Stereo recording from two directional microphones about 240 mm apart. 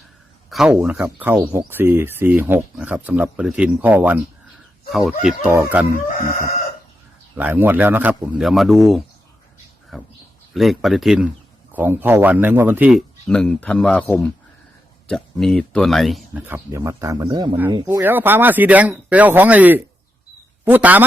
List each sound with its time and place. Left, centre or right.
0.5 s a man's voice: centre
5.2 s speech: centre
6.1 s chicken: left
7.3 s a man's voice: centre